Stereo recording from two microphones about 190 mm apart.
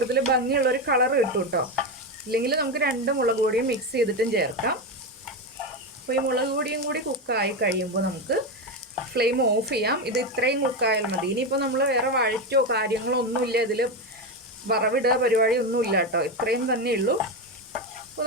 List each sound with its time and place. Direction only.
0.1 s stir: 60° right (ahead or behind)
6.1 s stir: 55° right (ahead or behind)